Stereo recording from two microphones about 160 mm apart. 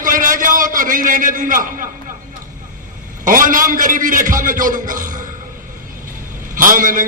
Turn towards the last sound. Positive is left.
turn(degrees=-55)  # may be behind; listen again after turning